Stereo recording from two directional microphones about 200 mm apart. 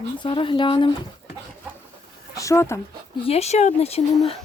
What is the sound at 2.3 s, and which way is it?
Speech, 15° left (ahead or behind).